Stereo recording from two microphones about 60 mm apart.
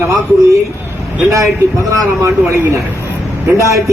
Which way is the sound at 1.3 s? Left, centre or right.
Right.